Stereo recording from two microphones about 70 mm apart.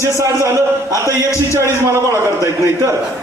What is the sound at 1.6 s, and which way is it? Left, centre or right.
A man's voice, right.